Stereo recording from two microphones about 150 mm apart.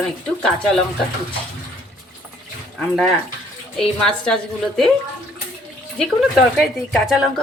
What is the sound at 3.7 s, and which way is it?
Speech, 5° left (ahead or behind).